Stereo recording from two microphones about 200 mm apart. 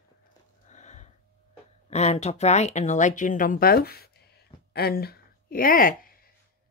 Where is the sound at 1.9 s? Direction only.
35° left (ahead or behind); by 4.2 s 50° left (ahead or behind).